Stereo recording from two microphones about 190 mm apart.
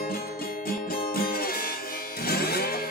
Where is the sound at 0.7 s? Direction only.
50° left (ahead or behind).